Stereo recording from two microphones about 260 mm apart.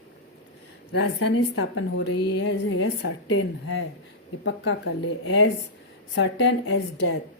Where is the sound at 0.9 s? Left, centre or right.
Left.